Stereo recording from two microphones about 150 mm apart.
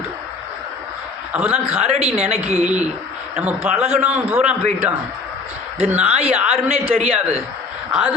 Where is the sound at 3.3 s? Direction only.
10° right (ahead or behind).